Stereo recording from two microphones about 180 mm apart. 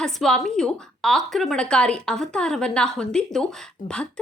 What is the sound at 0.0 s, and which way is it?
A woman's voice, centre (ahead or behind).